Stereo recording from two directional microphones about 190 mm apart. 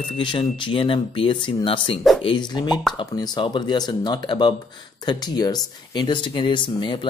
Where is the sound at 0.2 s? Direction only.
25° left (ahead or behind).